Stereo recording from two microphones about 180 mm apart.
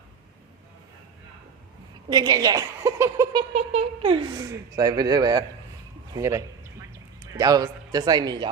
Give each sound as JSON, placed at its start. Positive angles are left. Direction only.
{"t": 2.0, "sound": "a woman's voice", "side_deg": -20}
{"t": 3.5, "sound": "a sound", "side_deg": -35}
{"t": 4.4, "sound": "a woman's voice", "side_deg": -20}